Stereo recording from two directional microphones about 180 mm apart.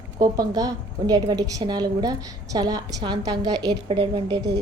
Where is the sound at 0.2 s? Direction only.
20° right (ahead or behind).